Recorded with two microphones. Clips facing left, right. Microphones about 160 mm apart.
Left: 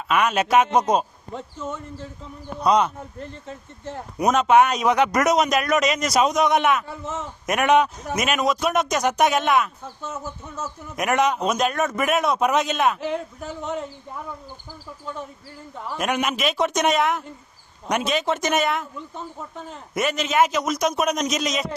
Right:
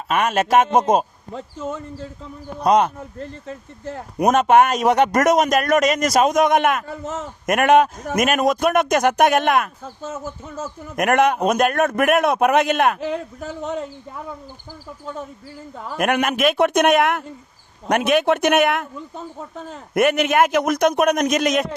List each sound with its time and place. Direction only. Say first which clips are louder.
0.1 s a man's voice: right 2 dB; 45° right (ahead or behind)
2.6 s a man's voice: right 3 dB; 55° right (ahead or behind)
4.2 s a man's voice: right 2 dB; 50° right (ahead or behind)
16.0 s a man's voice: right 5 dB; 60° right (ahead or behind)
19.9 s a man's voice: right 7 dB; 55° right (ahead or behind)